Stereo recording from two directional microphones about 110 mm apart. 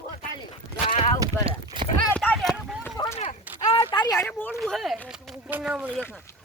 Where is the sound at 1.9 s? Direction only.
15° left (ahead or behind).